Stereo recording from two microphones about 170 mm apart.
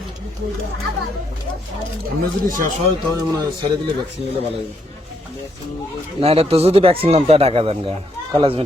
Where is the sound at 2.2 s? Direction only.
55° right (ahead or behind).